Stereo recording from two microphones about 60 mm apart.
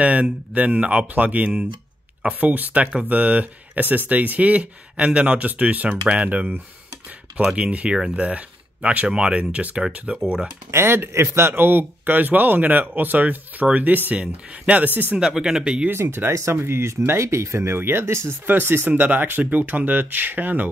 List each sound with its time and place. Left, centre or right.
0.0 s speech: right
10.1 s speech: centre
10.7 s speech: right
11.5 s speech: right
15.1 s speech: centre
15.9 s speech: right